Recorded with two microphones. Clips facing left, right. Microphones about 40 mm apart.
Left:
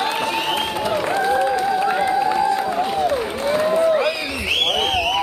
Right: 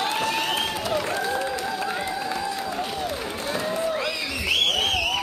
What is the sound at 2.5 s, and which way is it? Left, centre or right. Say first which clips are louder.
Applause: left 8 dB; left.